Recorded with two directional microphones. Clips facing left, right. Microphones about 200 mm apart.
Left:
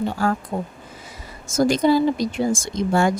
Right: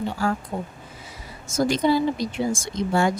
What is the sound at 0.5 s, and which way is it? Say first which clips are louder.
A woman's voice: left 3 dB; 50° left (ahead or behind).